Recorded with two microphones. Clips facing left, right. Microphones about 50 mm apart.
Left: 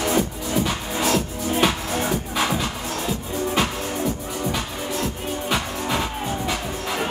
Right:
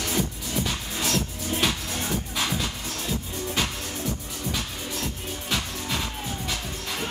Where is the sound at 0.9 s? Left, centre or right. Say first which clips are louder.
Left 7 dB; centre.